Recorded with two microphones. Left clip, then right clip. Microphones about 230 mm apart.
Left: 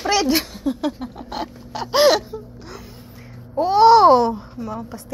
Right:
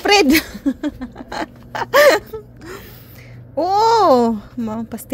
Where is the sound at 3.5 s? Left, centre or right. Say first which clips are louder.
Left 2 dB; right.